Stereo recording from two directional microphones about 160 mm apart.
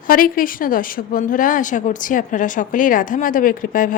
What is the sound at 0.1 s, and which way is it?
A woman's voice, 60° left (ahead or behind).